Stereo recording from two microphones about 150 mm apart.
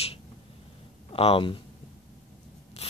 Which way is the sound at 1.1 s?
40° left (ahead or behind).